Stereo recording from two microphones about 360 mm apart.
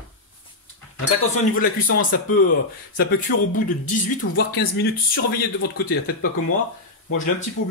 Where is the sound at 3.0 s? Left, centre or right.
Left.